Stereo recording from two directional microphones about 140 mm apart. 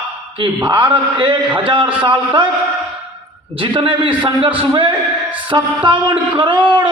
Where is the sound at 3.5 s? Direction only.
40° right (ahead or behind).